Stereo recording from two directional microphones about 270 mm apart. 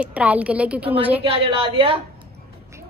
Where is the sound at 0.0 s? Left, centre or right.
Centre.